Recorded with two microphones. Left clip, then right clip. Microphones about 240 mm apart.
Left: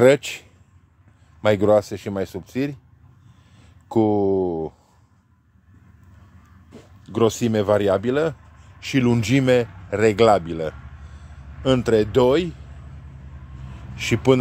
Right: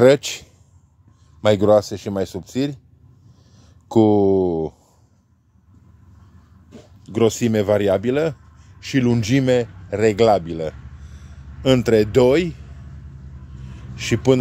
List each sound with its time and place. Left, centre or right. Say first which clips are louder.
0.0 s speech: right 2 dB; centre
3.9 s a sound: right 4 dB; right
7.0 s speech: right 2 dB; centre
11.1 s speech: even; centre
13.9 s a man's voice: right 1 dB; centre